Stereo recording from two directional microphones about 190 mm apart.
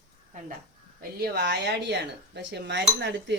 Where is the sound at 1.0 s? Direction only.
55° right (ahead or behind).